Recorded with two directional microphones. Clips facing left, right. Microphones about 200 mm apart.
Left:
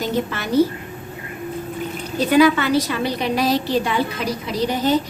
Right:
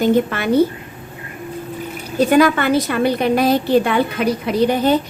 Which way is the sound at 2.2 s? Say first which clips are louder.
Right 1 dB; 50° right (ahead or behind).